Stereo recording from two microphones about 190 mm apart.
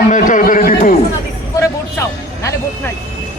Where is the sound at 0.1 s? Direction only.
45° left (ahead or behind).